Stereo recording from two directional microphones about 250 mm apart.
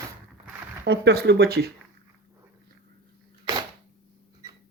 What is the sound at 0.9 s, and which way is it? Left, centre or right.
Speech, right.